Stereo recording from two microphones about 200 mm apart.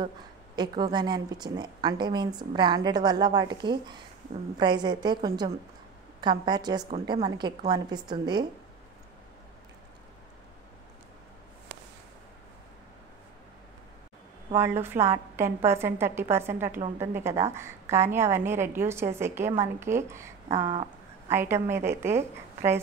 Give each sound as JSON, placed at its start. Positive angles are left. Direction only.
{"t": 0.6, "sound": "a woman's voice", "side_deg": -20}
{"t": 6.9, "sound": "a woman's voice", "side_deg": -30}
{"t": 7.2, "sound": "a woman's voice", "side_deg": -20}
{"t": 14.5, "sound": "a woman's voice", "side_deg": -10}